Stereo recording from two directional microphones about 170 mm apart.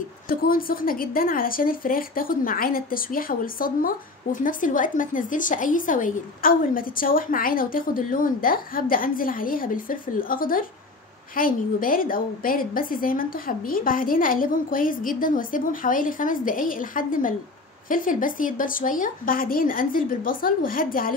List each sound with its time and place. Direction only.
0.3 s a woman's voice: 60° left (ahead or behind)